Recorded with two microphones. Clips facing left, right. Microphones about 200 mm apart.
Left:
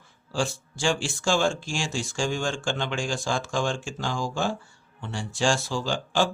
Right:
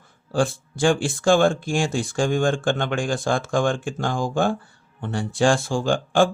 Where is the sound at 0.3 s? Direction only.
55° right (ahead or behind).